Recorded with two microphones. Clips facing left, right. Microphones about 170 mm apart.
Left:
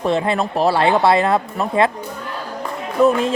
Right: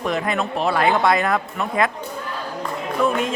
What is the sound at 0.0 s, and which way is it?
Speech, 30° left (ahead or behind).